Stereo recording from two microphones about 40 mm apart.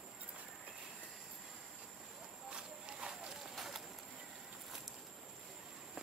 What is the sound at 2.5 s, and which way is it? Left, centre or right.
Clip-clop, centre.